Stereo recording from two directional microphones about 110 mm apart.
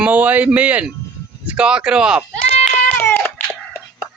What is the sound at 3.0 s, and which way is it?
Baby cry, 20° left (ahead or behind).